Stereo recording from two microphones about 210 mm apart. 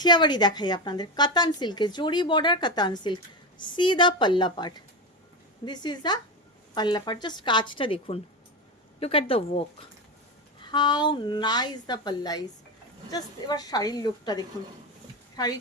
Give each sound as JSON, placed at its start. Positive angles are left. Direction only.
{"t": 0.0, "sound": "a woman's voice", "side_deg": 20}